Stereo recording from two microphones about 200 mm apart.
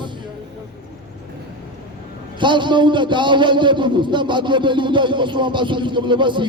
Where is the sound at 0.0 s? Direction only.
25° right (ahead or behind).